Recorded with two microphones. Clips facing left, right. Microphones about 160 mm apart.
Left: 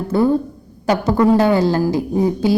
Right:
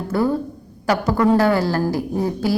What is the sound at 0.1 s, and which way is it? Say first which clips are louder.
A woman's voice: left 4 dB; 20° left (ahead or behind).